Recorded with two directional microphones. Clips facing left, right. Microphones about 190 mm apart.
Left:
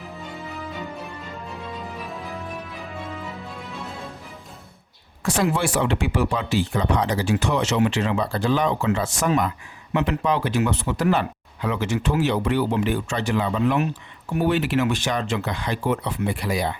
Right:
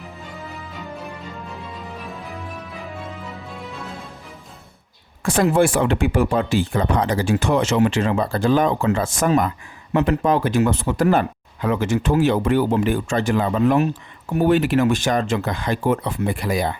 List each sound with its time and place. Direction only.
2.0 s music: centre (ahead or behind)
5.2 s speech: 50° right (ahead or behind)